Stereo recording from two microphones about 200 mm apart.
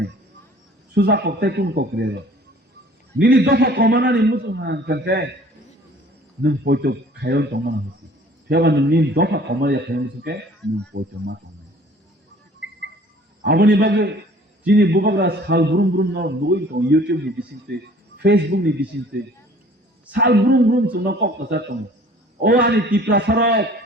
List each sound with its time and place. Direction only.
0.9 s a man's voice: 55° right (ahead or behind)
3.2 s a man's voice: 55° right (ahead or behind)
6.4 s a man's voice: 55° right (ahead or behind)
12.6 s cricket: 65° right (ahead or behind)
13.4 s a man's voice: 55° right (ahead or behind)
18.2 s a man's voice: 55° right (ahead or behind)
20.1 s a man's voice: 55° right (ahead or behind)